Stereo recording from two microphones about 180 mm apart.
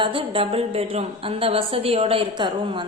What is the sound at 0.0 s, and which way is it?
A woman's voice, 30° right (ahead or behind).